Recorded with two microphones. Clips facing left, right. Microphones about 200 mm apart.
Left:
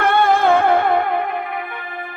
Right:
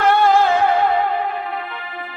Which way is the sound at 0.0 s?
55° left (ahead or behind).